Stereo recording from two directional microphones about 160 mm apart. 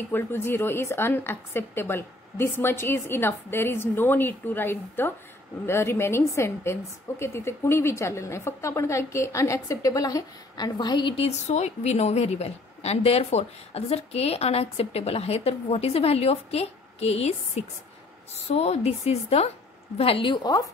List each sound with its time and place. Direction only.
0.1 s a woman's voice: 15° left (ahead or behind)